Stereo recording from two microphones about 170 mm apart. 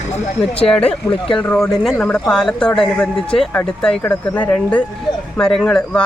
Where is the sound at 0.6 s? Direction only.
5° left (ahead or behind).